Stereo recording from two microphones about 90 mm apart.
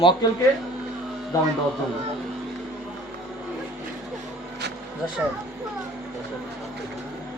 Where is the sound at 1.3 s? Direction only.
40° left (ahead or behind).